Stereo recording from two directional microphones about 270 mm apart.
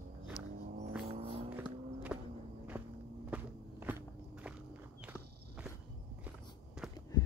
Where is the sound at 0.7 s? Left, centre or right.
Right.